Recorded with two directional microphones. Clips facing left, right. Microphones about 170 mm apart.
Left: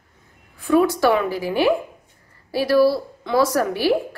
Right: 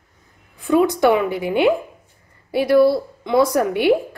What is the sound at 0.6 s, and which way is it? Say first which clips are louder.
A woman's voice: right 1 dB; 20° right (ahead or behind).